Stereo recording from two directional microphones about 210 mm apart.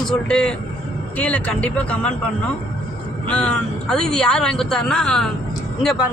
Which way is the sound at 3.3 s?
5° left (ahead or behind).